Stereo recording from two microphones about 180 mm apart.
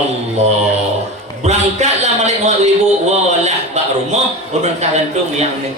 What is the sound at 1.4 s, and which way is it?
A man's voice, 40° right (ahead or behind).